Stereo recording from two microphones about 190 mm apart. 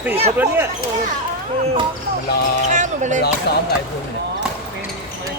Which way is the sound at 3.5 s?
60° left (ahead or behind).